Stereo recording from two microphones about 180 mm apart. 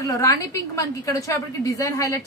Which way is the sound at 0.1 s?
20° left (ahead or behind).